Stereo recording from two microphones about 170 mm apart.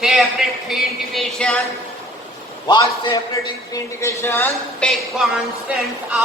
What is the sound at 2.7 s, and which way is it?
A man's voice, 25° left (ahead or behind).